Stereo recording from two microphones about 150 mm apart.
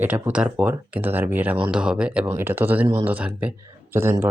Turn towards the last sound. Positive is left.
turn(degrees=-15)  # may be behind; listen again after turning